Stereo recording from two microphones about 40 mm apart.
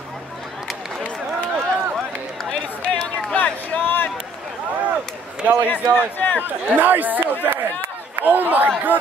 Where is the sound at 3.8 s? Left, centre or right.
Left.